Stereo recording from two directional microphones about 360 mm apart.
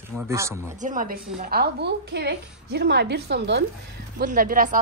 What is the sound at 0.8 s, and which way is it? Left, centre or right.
A woman's voice, right.